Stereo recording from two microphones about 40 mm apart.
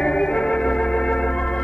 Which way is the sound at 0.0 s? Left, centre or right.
Left.